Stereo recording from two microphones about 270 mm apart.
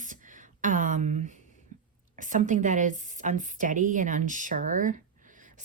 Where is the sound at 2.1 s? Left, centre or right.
Right.